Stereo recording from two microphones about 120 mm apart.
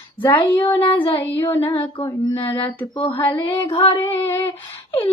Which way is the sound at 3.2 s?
15° left (ahead or behind).